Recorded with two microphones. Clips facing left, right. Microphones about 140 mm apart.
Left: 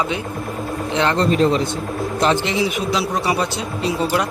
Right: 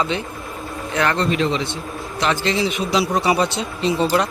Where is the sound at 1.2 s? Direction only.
40° left (ahead or behind).